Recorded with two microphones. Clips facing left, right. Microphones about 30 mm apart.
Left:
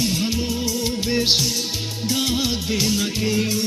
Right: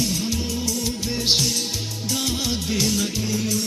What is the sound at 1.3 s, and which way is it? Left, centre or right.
Music, centre.